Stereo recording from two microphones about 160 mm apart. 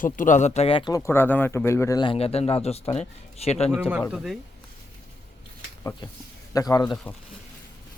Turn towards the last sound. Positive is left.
turn(degrees=25)  # may be behind; listen again after turning